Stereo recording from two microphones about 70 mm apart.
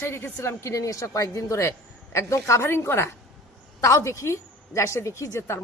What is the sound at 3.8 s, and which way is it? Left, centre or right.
A woman's voice, left.